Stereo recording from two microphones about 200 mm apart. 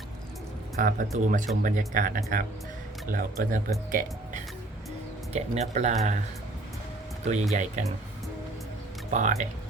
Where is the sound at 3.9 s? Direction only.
40° right (ahead or behind).